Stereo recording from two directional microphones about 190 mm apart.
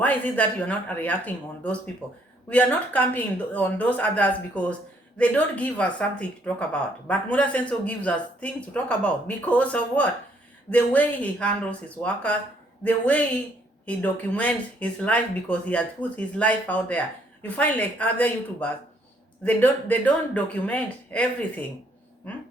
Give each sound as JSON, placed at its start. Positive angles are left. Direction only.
{"t": 0.0, "sound": "speech", "side_deg": 10}